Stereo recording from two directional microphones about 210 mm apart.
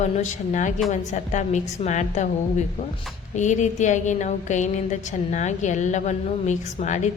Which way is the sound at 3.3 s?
35° left (ahead or behind).